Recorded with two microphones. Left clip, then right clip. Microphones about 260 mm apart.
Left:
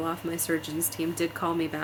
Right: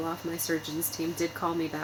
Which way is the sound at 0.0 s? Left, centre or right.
Centre.